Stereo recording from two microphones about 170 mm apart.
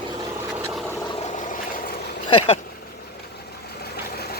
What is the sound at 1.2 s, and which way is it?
Vehicle, 45° left (ahead or behind).